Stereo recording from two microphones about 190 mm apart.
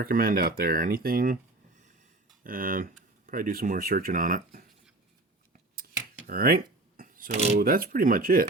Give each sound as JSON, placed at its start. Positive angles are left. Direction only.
{"t": 0.0, "sound": "speech", "side_deg": -50}
{"t": 2.4, "sound": "speech", "side_deg": -50}
{"t": 6.2, "sound": "speech", "side_deg": -50}